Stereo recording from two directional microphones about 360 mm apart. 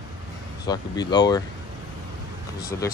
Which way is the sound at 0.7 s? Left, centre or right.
Centre.